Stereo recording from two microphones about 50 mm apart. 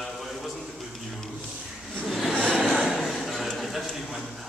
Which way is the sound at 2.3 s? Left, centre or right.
Centre.